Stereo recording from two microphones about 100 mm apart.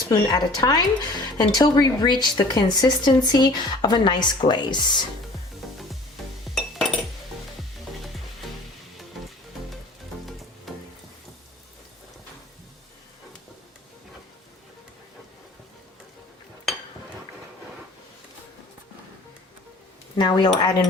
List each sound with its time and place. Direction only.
0.1 s a woman's voice: 45° left (ahead or behind)
6.5 s music: 5° left (ahead or behind)
8.4 s music: 5° left (ahead or behind)
10.7 s a sound: centre (ahead or behind)
20.1 s cutlery: 50° left (ahead or behind)